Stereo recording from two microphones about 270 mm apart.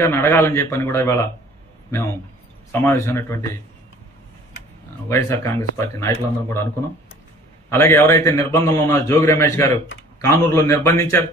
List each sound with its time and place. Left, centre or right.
0.0 s a man's voice: centre
2.7 s a man's voice: centre
5.0 s a man's voice: centre
7.7 s a man's voice: centre